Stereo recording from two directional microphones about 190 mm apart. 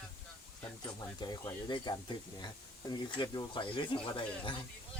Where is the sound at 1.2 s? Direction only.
20° left (ahead or behind).